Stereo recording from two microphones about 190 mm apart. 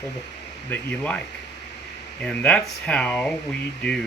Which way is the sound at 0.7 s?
10° left (ahead or behind).